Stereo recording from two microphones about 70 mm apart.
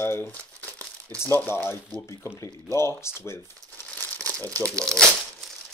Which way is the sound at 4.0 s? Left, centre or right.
Left.